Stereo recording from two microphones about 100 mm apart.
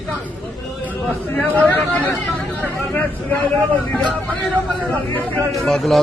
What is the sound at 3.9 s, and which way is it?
Speech, 10° left (ahead or behind).